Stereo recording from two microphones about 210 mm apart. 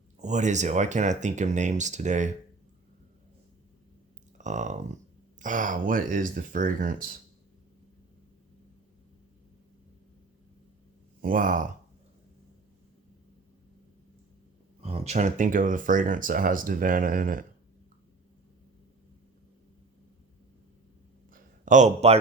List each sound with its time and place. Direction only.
0.2 s speech: 35° right (ahead or behind)
4.4 s speech: 35° right (ahead or behind)
11.2 s speech: 40° right (ahead or behind)
14.8 s speech: 30° right (ahead or behind)
21.2 s a sound: 40° right (ahead or behind)